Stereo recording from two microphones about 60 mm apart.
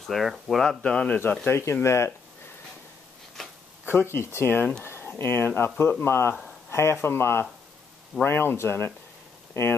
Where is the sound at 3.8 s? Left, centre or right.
Left.